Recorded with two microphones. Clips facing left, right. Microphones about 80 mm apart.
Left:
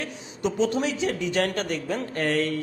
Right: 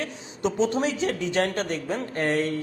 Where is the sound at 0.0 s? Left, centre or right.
Right.